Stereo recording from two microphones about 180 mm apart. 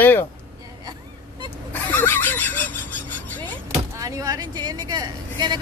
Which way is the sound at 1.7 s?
10° left (ahead or behind).